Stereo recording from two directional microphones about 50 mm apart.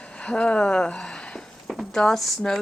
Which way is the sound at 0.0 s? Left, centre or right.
Left.